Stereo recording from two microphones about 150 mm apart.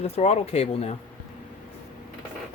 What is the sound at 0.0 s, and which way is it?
Speech, 45° left (ahead or behind).